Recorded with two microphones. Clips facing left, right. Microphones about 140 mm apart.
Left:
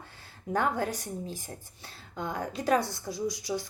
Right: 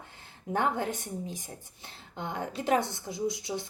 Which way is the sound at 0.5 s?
20° right (ahead or behind).